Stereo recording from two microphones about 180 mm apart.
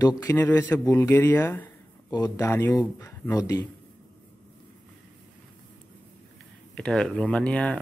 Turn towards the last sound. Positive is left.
turn(degrees=5)  # may be behind; listen again after turning